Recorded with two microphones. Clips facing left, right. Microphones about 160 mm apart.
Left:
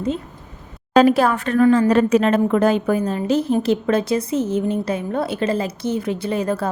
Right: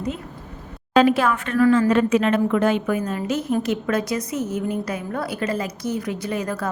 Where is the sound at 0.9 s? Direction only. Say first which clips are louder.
Left 3 dB; 40° left (ahead or behind).